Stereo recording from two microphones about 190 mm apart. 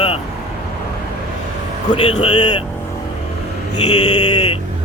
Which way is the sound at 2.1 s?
25° left (ahead or behind).